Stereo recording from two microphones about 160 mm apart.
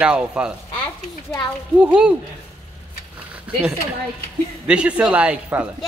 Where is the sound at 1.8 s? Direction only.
5° right (ahead or behind).